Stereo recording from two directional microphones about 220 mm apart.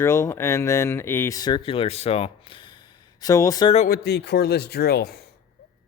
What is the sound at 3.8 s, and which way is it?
Speech, 40° left (ahead or behind).